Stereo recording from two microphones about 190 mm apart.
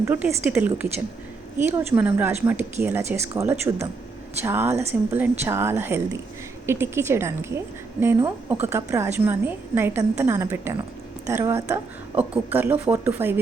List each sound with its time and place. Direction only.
0.0 s a woman's voice: 10° right (ahead or behind)